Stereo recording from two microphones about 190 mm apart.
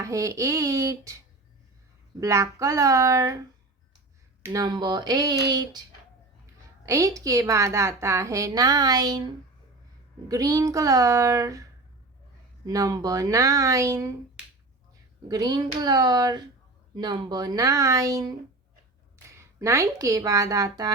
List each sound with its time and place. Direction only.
0.0 s a woman's voice: 15° right (ahead or behind)
2.2 s a woman's voice: 15° right (ahead or behind)
4.4 s speech: 20° right (ahead or behind)
6.8 s a woman's voice: 15° right (ahead or behind)
15.3 s speech: 20° right (ahead or behind)
19.4 s a woman's voice: 15° right (ahead or behind)